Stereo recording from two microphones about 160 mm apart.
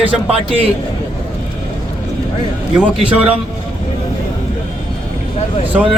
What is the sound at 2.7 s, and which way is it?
Speech, 5° right (ahead or behind).